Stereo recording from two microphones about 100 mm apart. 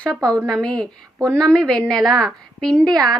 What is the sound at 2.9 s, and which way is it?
Speech, 40° right (ahead or behind).